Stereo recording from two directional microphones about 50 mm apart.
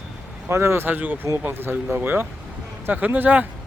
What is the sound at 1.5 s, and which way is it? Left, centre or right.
Speech, right.